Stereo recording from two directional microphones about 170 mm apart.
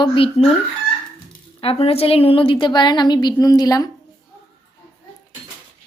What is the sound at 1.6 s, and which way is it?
A woman's voice, 35° left (ahead or behind).